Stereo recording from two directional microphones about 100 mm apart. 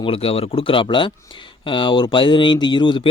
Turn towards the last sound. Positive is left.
turn(degrees=50)  # may be behind; listen again after turning